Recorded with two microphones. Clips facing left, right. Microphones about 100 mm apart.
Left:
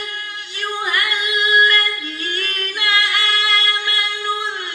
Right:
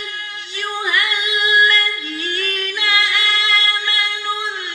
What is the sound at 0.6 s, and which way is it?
Female singing, 50° left (ahead or behind).